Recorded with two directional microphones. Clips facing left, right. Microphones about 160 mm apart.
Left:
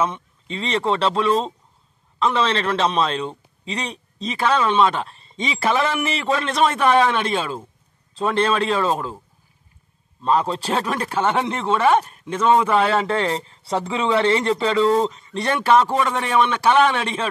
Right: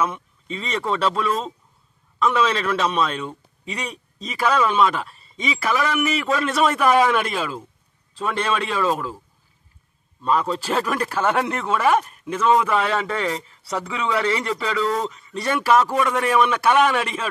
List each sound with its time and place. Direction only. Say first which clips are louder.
0.0 s speech: left 1 dB; 30° left (ahead or behind)
10.2 s speech: left 1 dB; 30° left (ahead or behind)